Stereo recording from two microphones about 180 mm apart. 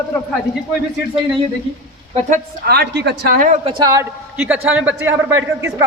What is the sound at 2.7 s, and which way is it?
Speech, 65° right (ahead or behind).